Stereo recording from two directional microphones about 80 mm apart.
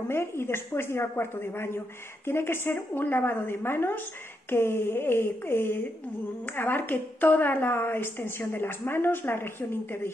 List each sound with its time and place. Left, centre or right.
0.1 s a woman's voice: left